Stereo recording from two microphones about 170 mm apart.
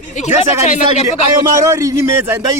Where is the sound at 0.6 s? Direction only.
40° left (ahead or behind).